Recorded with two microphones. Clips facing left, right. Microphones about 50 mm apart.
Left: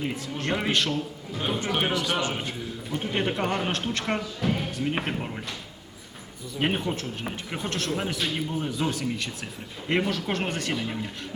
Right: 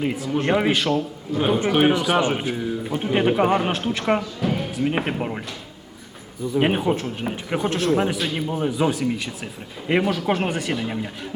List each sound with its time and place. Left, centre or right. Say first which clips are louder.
0.0 s a man's voice: right 8 dB; centre
1.9 s a man's voice: right 7 dB; right
2.4 s a man's voice: right 8 dB; centre
6.6 s a man's voice: right 6 dB; centre
8.4 s a man's voice: right 6 dB; centre